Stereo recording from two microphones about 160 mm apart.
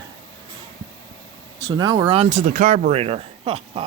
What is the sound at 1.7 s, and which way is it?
Speech, 25° right (ahead or behind).